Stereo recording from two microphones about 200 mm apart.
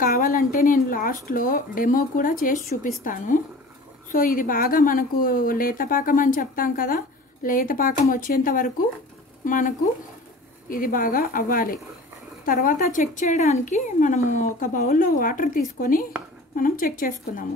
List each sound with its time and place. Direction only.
0.0 s a woman's voice: 45° left (ahead or behind)